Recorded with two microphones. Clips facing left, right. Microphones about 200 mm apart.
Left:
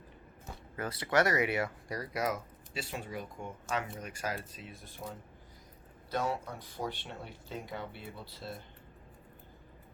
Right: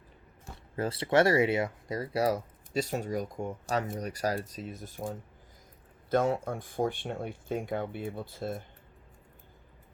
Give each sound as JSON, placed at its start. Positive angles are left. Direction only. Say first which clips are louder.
{"t": 0.8, "sound": "speech", "louder": "right 5 dB", "side_deg": -25}